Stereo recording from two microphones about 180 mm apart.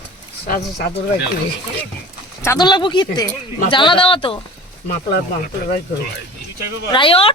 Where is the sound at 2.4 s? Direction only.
20° left (ahead or behind).